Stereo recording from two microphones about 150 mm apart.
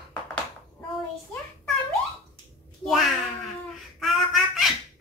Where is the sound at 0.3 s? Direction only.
5° left (ahead or behind).